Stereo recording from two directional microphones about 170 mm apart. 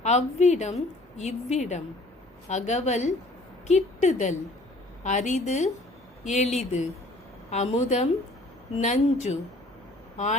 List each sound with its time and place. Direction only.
0.0 s a woman's voice: 40° left (ahead or behind)